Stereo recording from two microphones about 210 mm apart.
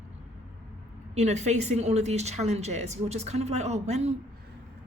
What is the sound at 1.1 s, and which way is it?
Speech, 30° right (ahead or behind).